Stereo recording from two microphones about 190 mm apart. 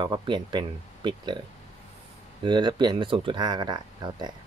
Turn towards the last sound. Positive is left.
turn(degrees=-25)  # may be behind; listen again after turning